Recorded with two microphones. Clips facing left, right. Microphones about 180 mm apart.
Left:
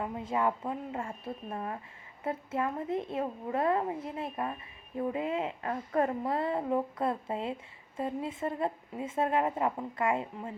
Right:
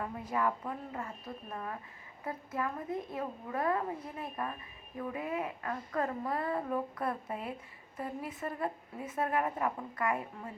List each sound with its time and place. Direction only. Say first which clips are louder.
0.0 s a woman's voice: left 3 dB; 25° left (ahead or behind)